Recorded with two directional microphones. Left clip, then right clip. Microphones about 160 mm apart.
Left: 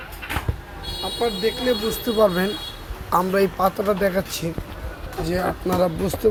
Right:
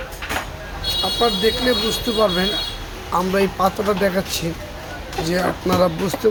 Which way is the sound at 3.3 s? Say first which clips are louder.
Right 1 dB; 20° left (ahead or behind).